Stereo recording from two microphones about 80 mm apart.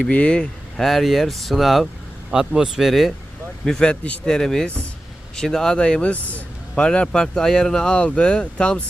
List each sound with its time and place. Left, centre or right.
0.0 s speech: centre
0.8 s speech: centre
3.7 s speech: centre